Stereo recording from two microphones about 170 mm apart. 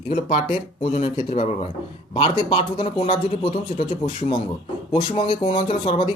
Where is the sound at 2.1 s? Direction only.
25° left (ahead or behind).